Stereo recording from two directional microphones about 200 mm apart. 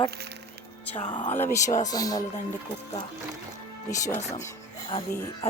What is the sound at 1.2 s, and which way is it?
Speech, 10° left (ahead or behind).